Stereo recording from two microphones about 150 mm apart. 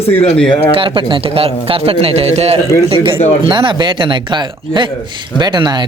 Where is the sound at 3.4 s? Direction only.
35° right (ahead or behind).